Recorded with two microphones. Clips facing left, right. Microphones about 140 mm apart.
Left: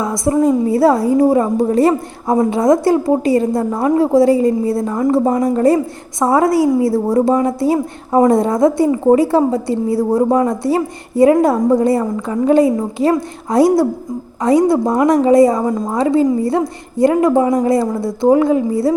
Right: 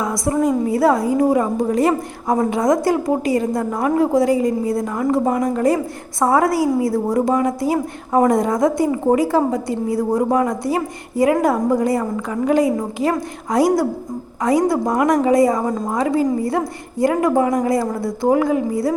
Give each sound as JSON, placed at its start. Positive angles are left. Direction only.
{"t": 0.0, "sound": "a woman's voice", "side_deg": 25}